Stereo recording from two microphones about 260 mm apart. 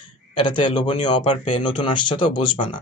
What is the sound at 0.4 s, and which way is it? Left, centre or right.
Speech, centre.